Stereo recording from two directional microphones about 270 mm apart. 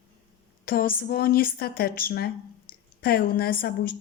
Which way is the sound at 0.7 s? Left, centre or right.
Left.